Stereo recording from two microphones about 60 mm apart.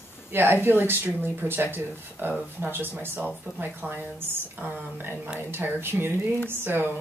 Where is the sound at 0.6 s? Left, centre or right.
Right.